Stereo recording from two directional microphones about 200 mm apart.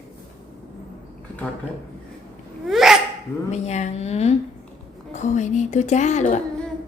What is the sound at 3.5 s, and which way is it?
A woman's voice, 35° left (ahead or behind).